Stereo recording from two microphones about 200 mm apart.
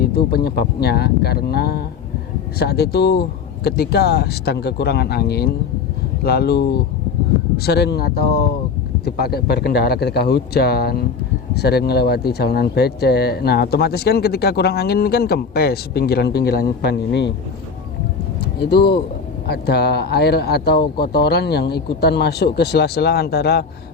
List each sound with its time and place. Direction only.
0.0 s speech: 50° left (ahead or behind)
18.6 s speech: 55° left (ahead or behind)